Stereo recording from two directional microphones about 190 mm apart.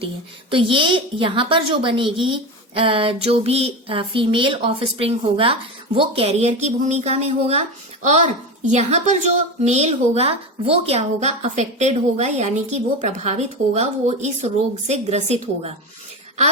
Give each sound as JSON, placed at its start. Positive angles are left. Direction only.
{"t": 0.5, "sound": "a woman's voice", "side_deg": -25}